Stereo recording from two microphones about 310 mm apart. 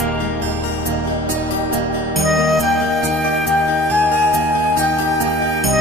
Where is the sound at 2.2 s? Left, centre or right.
Centre.